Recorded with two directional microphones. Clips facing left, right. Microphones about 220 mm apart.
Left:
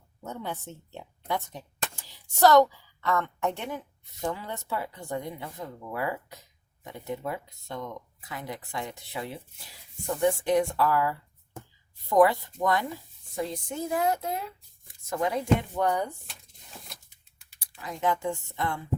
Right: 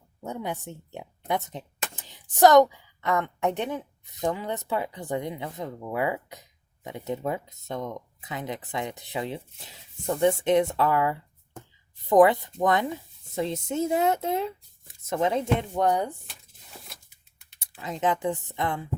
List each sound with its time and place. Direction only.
0.2 s a woman's voice: 15° right (ahead or behind)
17.7 s a woman's voice: 20° right (ahead or behind)